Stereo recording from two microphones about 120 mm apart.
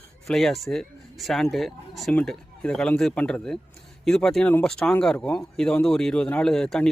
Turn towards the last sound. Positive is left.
turn(degrees=5)  # may be behind; listen again after turning